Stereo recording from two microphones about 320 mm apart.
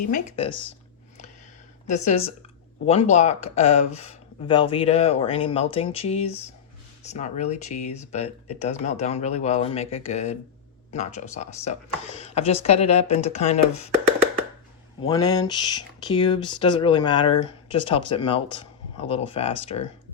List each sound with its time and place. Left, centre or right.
0.1 s speech: centre
1.9 s speech: centre
15.1 s speech: centre